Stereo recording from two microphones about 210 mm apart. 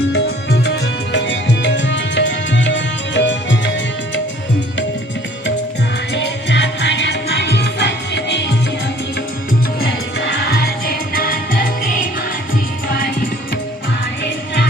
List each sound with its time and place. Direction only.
0.1 s music: 50° left (ahead or behind)
6.1 s music: 55° left (ahead or behind)
10.2 s music: 55° left (ahead or behind)